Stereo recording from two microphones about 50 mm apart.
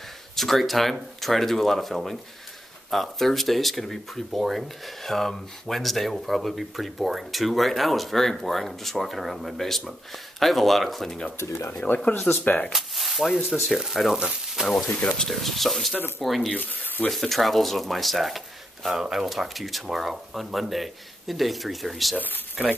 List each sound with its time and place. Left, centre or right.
0.4 s speech: centre
12.1 s speech: left
12.4 s speech: left
12.7 s a sound: centre
13.7 s speech: centre
14.1 s frying: centre
15.0 s speech: left
15.2 s speech: centre
16.5 s speech: left
17.1 s speech: centre